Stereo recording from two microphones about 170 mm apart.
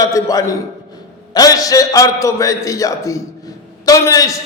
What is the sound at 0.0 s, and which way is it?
A man's voice, 20° left (ahead or behind).